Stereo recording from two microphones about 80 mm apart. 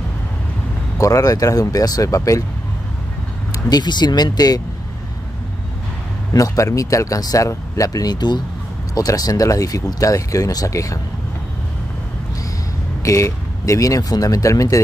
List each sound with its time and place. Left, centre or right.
0.9 s speech: left
3.5 s speech: left
6.3 s speech: left
8.9 s speech: left
13.0 s speech: left